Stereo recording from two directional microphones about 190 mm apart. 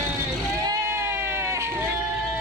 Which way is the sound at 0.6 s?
15° right (ahead or behind).